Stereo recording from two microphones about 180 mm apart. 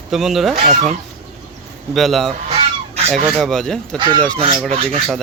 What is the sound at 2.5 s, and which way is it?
Goose, 35° right (ahead or behind).